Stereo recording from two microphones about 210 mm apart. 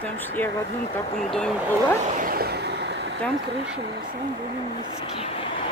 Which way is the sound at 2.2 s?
45° right (ahead or behind).